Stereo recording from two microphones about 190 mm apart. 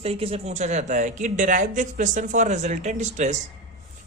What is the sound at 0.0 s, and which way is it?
Speech, 30° right (ahead or behind).